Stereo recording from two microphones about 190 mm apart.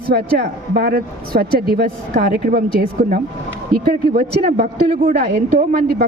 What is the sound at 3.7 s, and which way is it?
A woman's voice, 55° right (ahead or behind).